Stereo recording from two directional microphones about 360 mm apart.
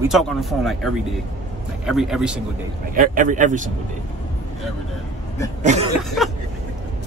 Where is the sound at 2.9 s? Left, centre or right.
Right.